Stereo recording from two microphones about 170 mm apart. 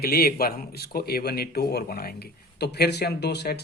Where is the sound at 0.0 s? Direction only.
65° left (ahead or behind).